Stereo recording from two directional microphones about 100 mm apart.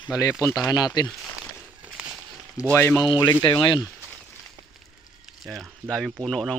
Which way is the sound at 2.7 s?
25° left (ahead or behind).